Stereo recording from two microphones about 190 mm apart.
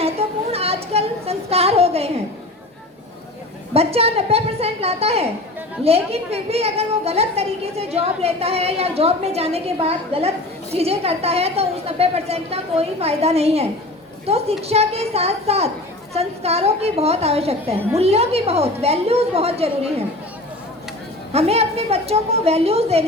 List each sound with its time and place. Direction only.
0.0 s a sound: 30° right (ahead or behind)
3.8 s a woman's voice: 30° right (ahead or behind)
21.3 s a woman's voice: 30° right (ahead or behind)